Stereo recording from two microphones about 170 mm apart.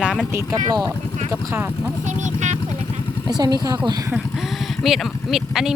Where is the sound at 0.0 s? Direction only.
Centre (ahead or behind).